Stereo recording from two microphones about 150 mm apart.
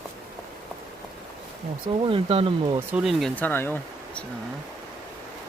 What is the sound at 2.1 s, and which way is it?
Speech, 35° right (ahead or behind).